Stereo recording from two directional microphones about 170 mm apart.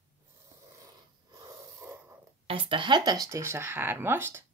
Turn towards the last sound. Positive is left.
turn(degrees=-15)  # may be behind; listen again after turning